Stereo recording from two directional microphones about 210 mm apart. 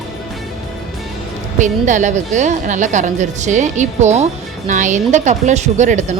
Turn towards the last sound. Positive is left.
turn(degrees=-35)  # may be behind; listen again after turning